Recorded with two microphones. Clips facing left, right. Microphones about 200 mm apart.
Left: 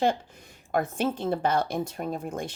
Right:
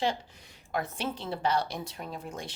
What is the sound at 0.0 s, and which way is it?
A woman's voice, 50° left (ahead or behind).